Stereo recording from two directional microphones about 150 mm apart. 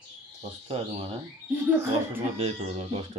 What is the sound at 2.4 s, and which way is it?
Speech, 45° right (ahead or behind).